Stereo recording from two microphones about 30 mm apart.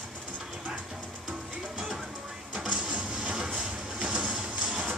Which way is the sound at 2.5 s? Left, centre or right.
Right.